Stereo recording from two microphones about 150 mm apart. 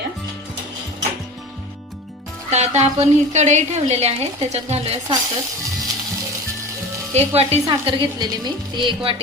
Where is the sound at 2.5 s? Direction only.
50° right (ahead or behind).